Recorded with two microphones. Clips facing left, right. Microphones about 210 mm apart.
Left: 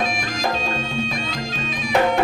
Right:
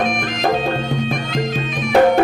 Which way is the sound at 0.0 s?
55° right (ahead or behind).